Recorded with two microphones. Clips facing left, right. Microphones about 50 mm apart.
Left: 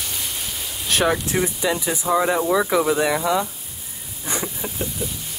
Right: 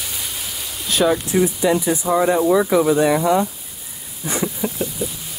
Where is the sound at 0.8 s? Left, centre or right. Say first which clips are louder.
Right 2 dB; left.